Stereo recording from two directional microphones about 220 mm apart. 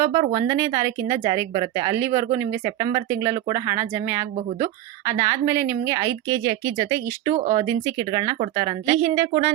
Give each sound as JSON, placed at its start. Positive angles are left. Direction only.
{"t": 0.0, "sound": "speech", "side_deg": -15}
{"t": 7.3, "sound": "speech", "side_deg": -35}
{"t": 7.6, "sound": "a woman's voice", "side_deg": -15}